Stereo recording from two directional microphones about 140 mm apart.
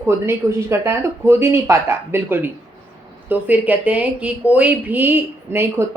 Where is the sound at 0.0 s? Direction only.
20° right (ahead or behind).